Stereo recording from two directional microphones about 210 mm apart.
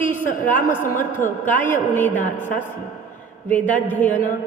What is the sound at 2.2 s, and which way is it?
Speech, 40° left (ahead or behind).